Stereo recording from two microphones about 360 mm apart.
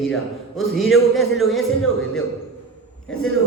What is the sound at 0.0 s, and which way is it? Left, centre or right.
A man's voice, centre.